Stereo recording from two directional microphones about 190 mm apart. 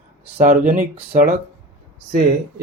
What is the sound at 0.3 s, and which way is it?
Speech, 45° right (ahead or behind).